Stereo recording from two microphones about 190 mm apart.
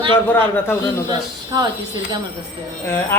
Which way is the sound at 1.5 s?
20° right (ahead or behind).